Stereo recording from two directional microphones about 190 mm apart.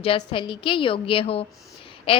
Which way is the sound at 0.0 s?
30° left (ahead or behind).